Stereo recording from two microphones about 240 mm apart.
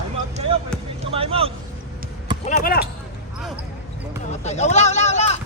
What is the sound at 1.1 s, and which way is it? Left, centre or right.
Speech, right.